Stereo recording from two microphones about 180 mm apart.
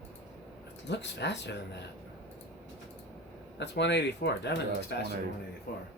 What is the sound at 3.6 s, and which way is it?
Speech, 75° left (ahead or behind).